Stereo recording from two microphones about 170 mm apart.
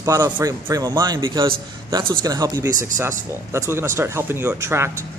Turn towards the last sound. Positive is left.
turn(degrees=-15)  # may be behind; listen again after turning